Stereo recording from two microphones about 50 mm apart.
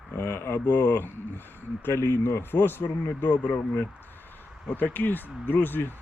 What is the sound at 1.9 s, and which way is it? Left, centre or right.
Speech, left.